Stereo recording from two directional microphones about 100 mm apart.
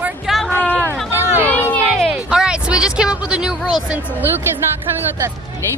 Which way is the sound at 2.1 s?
10° right (ahead or behind).